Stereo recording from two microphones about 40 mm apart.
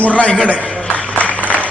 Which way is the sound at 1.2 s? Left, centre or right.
Left.